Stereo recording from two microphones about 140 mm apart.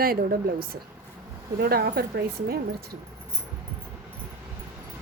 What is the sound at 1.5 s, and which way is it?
Speech, 90° right.